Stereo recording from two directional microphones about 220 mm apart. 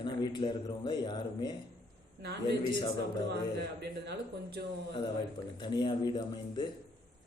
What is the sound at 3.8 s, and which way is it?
Speech, 45° right (ahead or behind).